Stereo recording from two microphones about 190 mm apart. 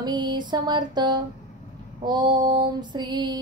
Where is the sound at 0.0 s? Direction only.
20° right (ahead or behind).